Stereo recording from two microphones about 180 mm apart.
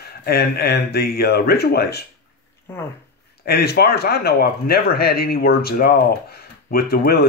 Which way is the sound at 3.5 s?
60° left (ahead or behind).